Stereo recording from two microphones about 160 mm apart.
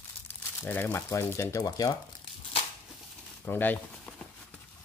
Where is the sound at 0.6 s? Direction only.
15° left (ahead or behind).